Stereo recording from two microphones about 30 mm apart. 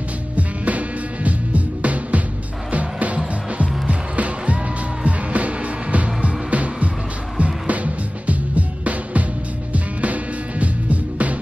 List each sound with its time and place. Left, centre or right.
0.4 s music: right
5.0 s music: right